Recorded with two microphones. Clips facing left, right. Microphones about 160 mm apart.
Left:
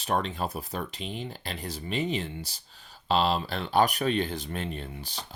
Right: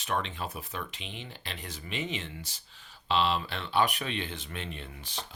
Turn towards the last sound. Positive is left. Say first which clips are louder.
# left 4 dB
turn(degrees=35)  # may be behind; listen again after turning